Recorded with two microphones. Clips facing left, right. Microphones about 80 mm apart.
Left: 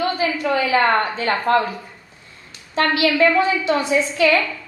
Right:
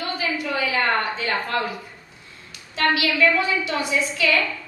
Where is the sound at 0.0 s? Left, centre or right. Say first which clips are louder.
Left 6 dB; left.